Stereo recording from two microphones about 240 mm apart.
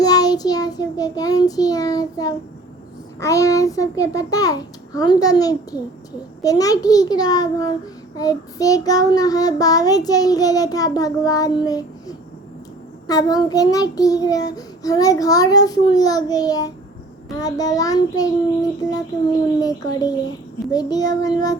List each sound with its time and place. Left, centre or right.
0.0 s child singing: centre
19.5 s child singing: centre